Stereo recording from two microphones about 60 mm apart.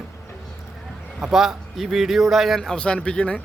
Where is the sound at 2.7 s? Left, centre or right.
Centre.